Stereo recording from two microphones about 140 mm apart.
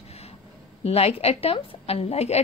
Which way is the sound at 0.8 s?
45° left (ahead or behind).